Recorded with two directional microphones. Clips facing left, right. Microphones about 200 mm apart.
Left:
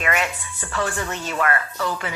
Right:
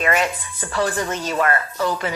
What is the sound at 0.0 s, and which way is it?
A woman's voice, 35° right (ahead or behind).